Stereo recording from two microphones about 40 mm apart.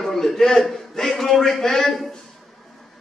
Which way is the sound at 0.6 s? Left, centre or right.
Centre.